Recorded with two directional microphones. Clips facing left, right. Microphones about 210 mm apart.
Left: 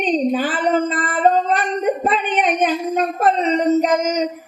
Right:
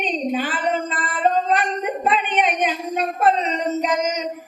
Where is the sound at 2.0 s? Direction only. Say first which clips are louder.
Left 2 dB; 40° left (ahead or behind).